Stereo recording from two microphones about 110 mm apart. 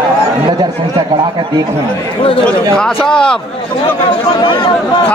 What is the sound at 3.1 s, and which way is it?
Speech, 5° left (ahead or behind).